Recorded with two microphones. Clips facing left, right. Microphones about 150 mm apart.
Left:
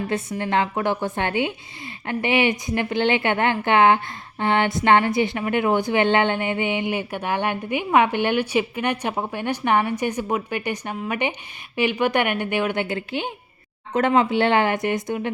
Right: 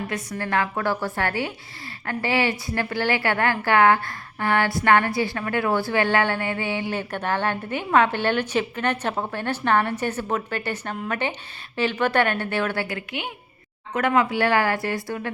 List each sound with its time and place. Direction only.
0.1 s a woman's voice: 20° left (ahead or behind)